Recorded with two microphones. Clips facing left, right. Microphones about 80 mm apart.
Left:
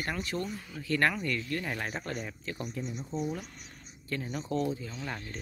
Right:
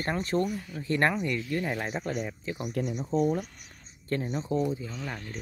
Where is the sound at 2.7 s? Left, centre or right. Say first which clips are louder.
Right 12 dB; right.